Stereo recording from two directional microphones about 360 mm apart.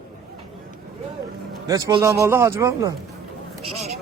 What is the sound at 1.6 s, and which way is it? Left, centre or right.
Speech, centre.